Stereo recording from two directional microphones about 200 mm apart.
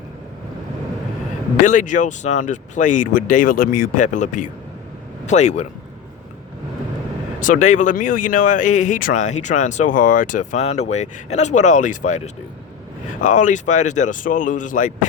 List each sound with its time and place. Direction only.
1.6 s speech: 40° left (ahead or behind)
7.3 s speech: 40° left (ahead or behind)